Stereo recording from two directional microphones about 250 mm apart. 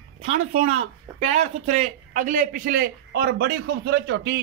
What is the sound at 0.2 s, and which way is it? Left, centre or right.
Speech, right.